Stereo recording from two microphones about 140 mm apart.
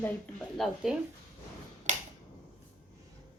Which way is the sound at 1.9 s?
55° right (ahead or behind).